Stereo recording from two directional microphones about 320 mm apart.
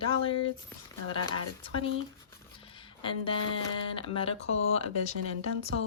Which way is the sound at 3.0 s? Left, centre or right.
Centre.